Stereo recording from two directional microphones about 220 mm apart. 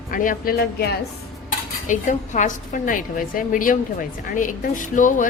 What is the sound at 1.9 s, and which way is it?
A woman's voice, 35° left (ahead or behind).